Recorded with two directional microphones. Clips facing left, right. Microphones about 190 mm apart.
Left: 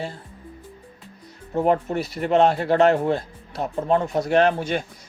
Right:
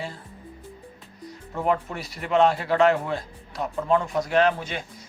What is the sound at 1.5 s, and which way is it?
Speech, 30° left (ahead or behind).